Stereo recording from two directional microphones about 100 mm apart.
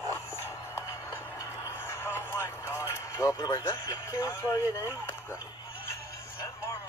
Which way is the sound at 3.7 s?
30° left (ahead or behind).